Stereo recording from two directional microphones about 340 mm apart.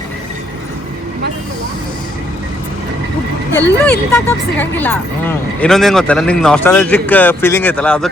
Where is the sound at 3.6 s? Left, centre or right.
Centre.